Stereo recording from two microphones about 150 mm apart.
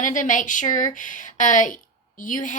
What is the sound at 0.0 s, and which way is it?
Speech, 60° left (ahead or behind).